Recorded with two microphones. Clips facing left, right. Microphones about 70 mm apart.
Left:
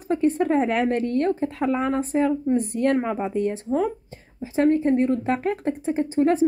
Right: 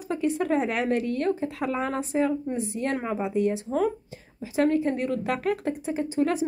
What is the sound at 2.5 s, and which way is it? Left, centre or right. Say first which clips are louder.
Speech: left 7 dB; left.